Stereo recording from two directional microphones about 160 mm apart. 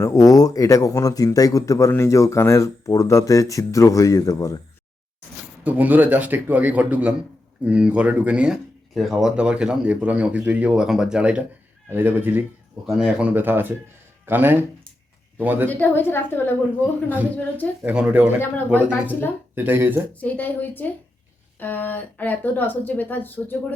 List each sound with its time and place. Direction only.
0.0 s speech: 20° left (ahead or behind)
5.6 s speech: 10° right (ahead or behind)
15.7 s a woman's voice: 10° left (ahead or behind)
17.8 s speech: 10° right (ahead or behind)
18.9 s a woman's voice: 10° left (ahead or behind)
19.5 s speech: 15° right (ahead or behind)
20.2 s a woman's voice: 10° left (ahead or behind)